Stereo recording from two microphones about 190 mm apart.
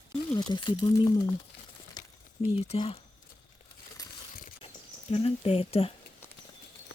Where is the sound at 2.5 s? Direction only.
30° left (ahead or behind).